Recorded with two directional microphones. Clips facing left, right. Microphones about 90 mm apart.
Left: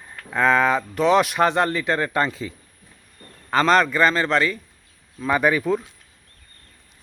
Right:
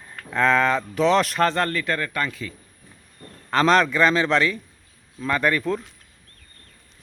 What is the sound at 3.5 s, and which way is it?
Speech, centre (ahead or behind).